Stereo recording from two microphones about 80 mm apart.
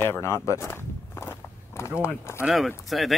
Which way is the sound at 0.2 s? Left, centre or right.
Left.